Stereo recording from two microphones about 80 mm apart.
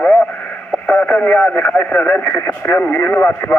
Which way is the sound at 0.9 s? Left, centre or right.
Centre.